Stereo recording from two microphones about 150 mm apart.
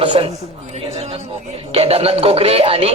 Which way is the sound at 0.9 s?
45° right (ahead or behind).